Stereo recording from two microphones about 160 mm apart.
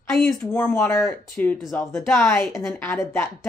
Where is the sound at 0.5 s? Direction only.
15° left (ahead or behind).